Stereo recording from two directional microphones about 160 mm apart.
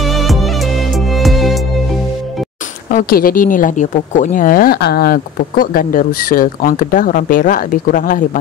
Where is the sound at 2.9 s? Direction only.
65° left (ahead or behind).